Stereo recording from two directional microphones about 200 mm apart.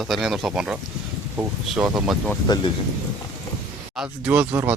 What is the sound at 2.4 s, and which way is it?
Speech, 20° left (ahead or behind).